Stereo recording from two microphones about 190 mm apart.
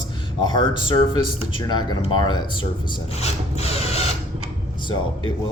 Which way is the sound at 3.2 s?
35° left (ahead or behind).